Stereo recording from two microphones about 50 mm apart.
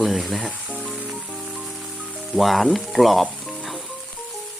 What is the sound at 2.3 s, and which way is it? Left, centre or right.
Speech, centre.